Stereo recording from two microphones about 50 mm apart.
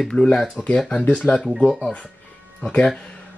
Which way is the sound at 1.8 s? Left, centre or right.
Left.